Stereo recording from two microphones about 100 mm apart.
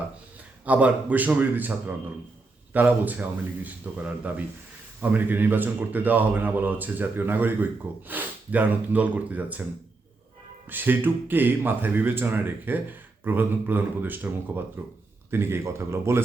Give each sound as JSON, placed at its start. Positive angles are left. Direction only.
{"t": 0.6, "sound": "speech", "side_deg": -15}
{"t": 2.7, "sound": "speech", "side_deg": -15}
{"t": 10.7, "sound": "speech", "side_deg": -20}